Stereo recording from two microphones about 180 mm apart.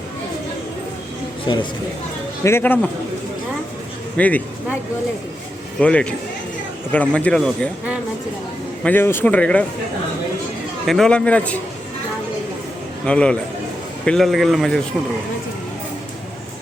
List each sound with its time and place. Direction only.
2.4 s a man's voice: 15° left (ahead or behind)
4.2 s a man's voice: 10° left (ahead or behind)
5.8 s a man's voice: 5° left (ahead or behind)
8.8 s a man's voice: 10° left (ahead or behind)
10.8 s speech: centre (ahead or behind)
13.1 s speech: 5° left (ahead or behind)